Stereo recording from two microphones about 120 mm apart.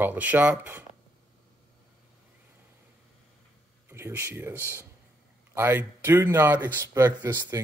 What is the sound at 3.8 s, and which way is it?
Speech, 20° right (ahead or behind).